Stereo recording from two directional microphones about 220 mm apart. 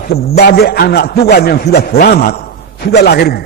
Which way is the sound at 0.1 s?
45° left (ahead or behind).